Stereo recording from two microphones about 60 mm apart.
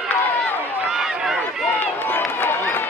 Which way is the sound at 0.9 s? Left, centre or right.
Centre.